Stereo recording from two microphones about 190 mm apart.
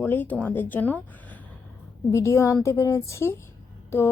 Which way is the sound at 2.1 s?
15° left (ahead or behind).